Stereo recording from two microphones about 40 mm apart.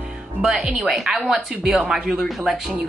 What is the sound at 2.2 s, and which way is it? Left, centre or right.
Speech, centre.